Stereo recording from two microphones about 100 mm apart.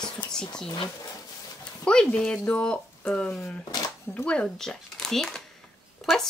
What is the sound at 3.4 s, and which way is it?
Speech, 35° left (ahead or behind).